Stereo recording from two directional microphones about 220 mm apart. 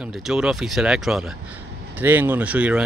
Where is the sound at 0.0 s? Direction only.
Centre (ahead or behind).